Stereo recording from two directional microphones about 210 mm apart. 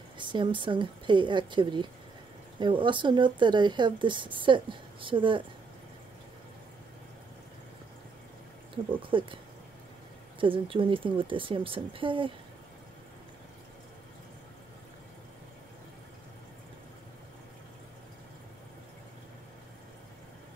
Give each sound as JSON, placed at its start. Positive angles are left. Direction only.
{"t": 0.2, "sound": "speech", "side_deg": -20}
{"t": 9.0, "sound": "speech", "side_deg": -25}
{"t": 10.4, "sound": "speech", "side_deg": -25}